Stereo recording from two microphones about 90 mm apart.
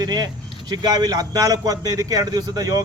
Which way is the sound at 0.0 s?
50° right (ahead or behind).